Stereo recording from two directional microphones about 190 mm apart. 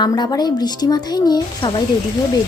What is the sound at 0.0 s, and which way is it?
A woman's voice, 25° left (ahead or behind).